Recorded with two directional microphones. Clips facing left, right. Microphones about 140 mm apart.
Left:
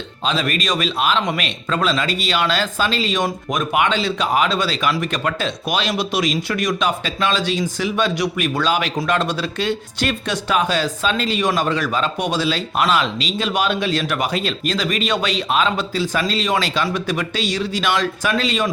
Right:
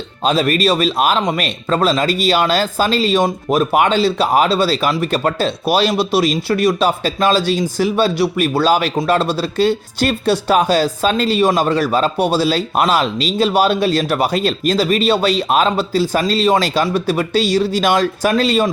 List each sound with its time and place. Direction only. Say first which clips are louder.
0.3 s speech: right 7 dB; 40° right (ahead or behind)